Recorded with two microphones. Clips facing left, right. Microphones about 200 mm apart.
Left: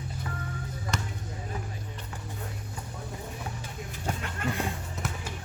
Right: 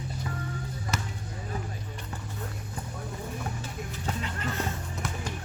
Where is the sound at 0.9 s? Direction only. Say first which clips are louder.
Even; 5° right (ahead or behind).